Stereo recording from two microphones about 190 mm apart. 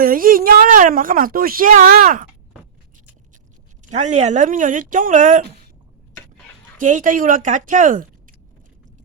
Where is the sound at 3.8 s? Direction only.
40° right (ahead or behind).